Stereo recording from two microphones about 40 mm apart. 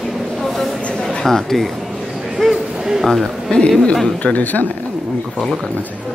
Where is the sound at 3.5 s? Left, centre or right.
Left.